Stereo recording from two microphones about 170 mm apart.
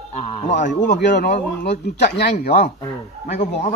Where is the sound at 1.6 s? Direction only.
80° left.